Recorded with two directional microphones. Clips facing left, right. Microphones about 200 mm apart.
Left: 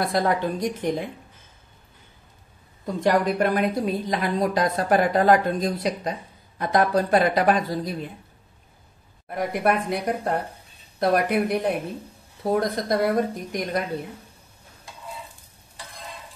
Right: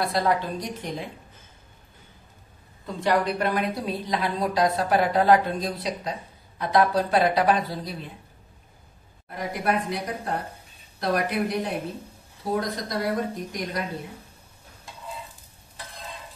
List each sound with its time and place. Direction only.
0.0 s a woman's voice: 50° left (ahead or behind)
2.8 s a woman's voice: 45° left (ahead or behind)
9.3 s speech: 55° left (ahead or behind)